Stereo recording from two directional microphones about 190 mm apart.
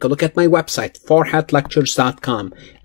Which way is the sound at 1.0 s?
35° left (ahead or behind).